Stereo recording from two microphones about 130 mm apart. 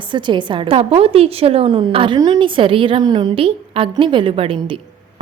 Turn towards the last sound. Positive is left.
turn(degrees=-45)  # may be behind; listen again after turning